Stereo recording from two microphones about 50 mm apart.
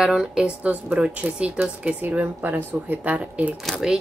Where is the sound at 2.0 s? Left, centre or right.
Right.